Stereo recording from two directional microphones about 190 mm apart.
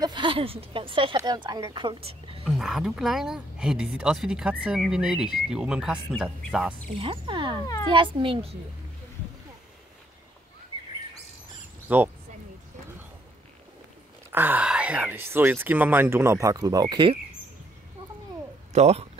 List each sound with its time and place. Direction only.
0.0 s a woman's voice: 25° right (ahead or behind)
2.4 s speech: 5° right (ahead or behind)
7.0 s a woman's voice: 25° right (ahead or behind)
7.6 s speech: 20° left (ahead or behind)
7.9 s a woman's voice: 25° right (ahead or behind)
11.9 s speech: 10° right (ahead or behind)
14.3 s speech: 10° right (ahead or behind)
18.7 s speech: 35° right (ahead or behind)